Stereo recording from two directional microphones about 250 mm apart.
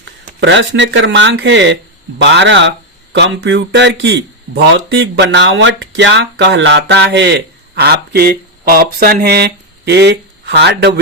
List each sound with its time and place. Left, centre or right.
0.3 s speech: right